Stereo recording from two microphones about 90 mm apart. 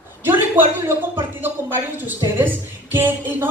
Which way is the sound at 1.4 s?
25° right (ahead or behind).